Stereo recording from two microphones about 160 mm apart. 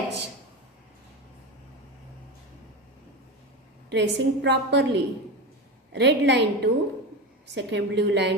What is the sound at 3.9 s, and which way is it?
A woman's voice, 90° right.